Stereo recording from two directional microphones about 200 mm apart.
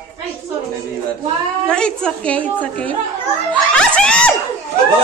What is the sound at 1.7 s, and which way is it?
A woman's voice, 5° left (ahead or behind).